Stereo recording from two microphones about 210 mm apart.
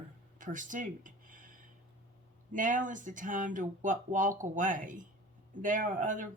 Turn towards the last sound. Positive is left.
turn(degrees=-40)  # may be behind; listen again after turning